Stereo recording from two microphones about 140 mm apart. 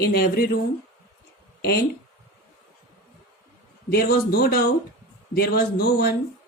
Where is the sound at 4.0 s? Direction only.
90° left.